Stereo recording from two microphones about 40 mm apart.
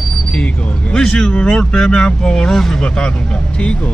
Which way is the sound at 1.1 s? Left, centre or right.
Centre.